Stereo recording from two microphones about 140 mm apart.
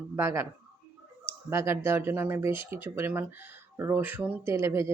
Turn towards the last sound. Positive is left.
turn(degrees=-20)  # may be behind; listen again after turning